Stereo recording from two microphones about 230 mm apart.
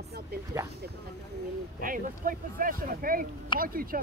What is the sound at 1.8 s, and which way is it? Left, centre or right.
A man's voice, right.